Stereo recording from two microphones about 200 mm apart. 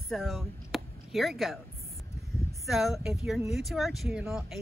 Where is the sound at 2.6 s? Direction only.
Centre (ahead or behind).